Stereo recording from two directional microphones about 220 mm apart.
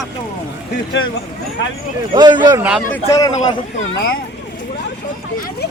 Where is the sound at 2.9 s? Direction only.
15° left (ahead or behind).